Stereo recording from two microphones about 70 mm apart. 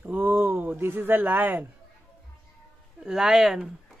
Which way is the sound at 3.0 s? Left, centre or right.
Centre.